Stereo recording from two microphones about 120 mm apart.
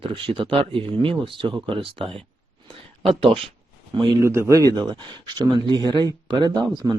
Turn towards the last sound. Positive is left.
turn(degrees=-35)  # may be behind; listen again after turning